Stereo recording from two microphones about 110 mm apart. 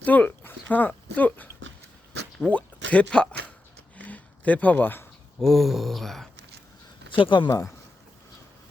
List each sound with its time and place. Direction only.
0.0 s speech: 15° left (ahead or behind)
3.9 s a sound: 15° left (ahead or behind)
5.4 s speech: centre (ahead or behind)
7.1 s speech: 45° left (ahead or behind)